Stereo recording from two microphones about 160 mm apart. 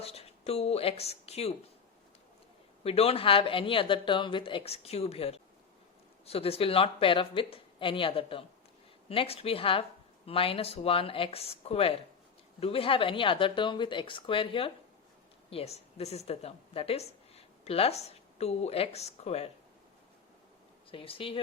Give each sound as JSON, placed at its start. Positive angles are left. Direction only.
{"t": 0.0, "sound": "speech", "side_deg": 40}
{"t": 2.8, "sound": "a woman's voice", "side_deg": 40}
{"t": 20.9, "sound": "speech", "side_deg": 35}